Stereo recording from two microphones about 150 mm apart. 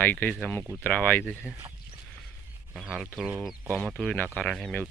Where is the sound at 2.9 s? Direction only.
10° left (ahead or behind).